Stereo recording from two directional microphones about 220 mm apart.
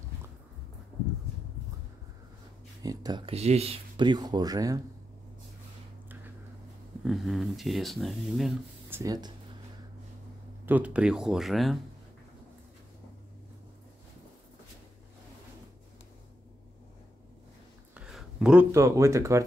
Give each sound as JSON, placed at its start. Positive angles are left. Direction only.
{"t": 2.8, "sound": "speech", "side_deg": -15}
{"t": 7.1, "sound": "speech", "side_deg": 0}
{"t": 9.0, "sound": "speech", "side_deg": -15}
{"t": 10.6, "sound": "speech", "side_deg": -5}
{"t": 17.9, "sound": "speech", "side_deg": -5}